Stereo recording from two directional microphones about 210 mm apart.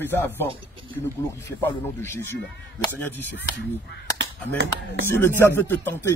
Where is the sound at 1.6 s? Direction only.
10° left (ahead or behind).